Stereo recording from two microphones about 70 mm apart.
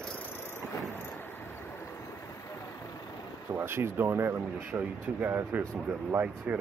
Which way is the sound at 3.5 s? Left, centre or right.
Right.